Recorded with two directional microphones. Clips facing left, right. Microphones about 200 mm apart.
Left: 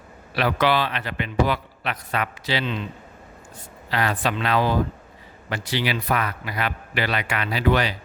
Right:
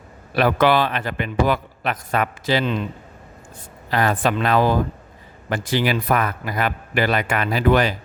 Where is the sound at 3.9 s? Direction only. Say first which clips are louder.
Right 4 dB; 45° right (ahead or behind).